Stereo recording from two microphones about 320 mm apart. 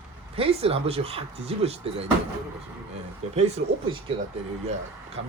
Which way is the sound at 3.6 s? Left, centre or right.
Right.